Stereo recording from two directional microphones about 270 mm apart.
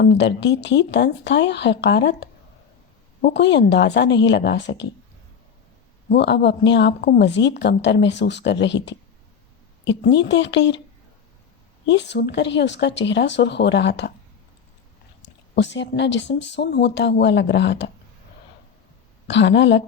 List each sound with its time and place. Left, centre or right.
0.0 s a woman's voice: left
6.1 s a woman's voice: left
11.9 s a woman's voice: left
15.5 s a woman's voice: left
19.3 s a woman's voice: left